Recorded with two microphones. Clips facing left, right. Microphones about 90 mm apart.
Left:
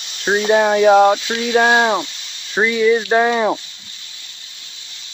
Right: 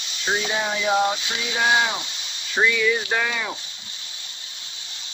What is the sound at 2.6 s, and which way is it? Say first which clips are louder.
Speech: left 6 dB; 30° left (ahead or behind).